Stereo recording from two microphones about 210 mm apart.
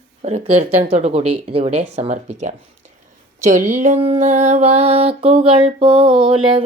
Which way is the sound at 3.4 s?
35° right (ahead or behind).